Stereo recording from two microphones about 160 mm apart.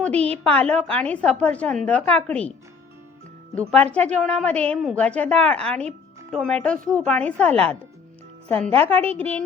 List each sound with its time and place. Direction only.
0.1 s a woman's voice: 40° right (ahead or behind)
0.4 s a woman's voice: 10° left (ahead or behind)
3.7 s a woman's voice: 5° left (ahead or behind)
8.7 s a woman's voice: 35° right (ahead or behind)
9.1 s a woman's voice: 10° left (ahead or behind)